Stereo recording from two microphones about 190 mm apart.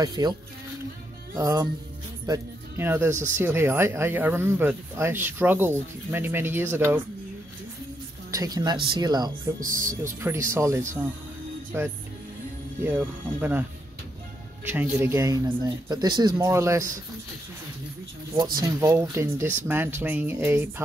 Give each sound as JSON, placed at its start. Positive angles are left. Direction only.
{"t": 0.0, "sound": "speech", "side_deg": -20}
{"t": 8.3, "sound": "speech", "side_deg": -20}
{"t": 9.6, "sound": "speech", "side_deg": -45}
{"t": 10.5, "sound": "speech", "side_deg": -15}
{"t": 18.3, "sound": "speech", "side_deg": -20}